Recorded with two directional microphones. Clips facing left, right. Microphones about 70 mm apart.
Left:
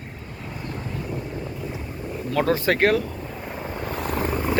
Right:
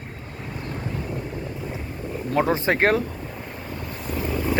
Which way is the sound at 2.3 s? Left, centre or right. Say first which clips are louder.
Even; right.